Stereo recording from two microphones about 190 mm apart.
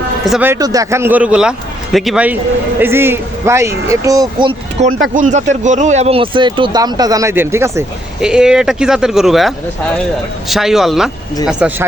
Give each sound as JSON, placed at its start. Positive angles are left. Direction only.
{"t": 0.3, "sound": "a man's voice", "side_deg": -10}
{"t": 5.1, "sound": "a man's voice", "side_deg": -40}